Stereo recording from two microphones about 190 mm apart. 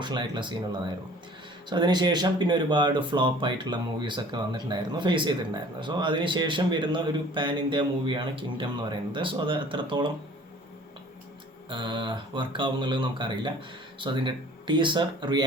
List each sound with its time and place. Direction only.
0.0 s speech: 25° right (ahead or behind)
11.7 s speech: 25° right (ahead or behind)